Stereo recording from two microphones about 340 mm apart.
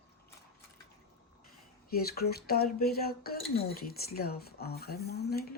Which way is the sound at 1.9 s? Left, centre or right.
Left.